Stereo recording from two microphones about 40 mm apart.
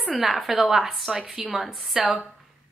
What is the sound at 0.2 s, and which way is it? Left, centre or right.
A woman's voice, centre.